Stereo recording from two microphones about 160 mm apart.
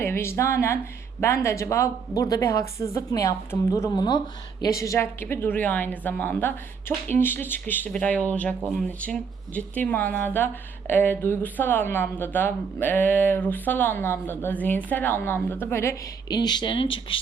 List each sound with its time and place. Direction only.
0.0 s a woman's voice: 15° left (ahead or behind); by 17.2 s 35° left (ahead or behind)